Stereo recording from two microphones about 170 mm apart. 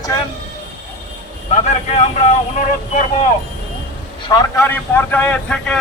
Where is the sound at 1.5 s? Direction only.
40° left (ahead or behind).